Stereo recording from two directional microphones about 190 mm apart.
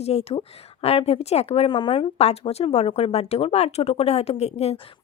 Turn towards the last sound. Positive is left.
turn(degrees=35)  # may be behind; listen again after turning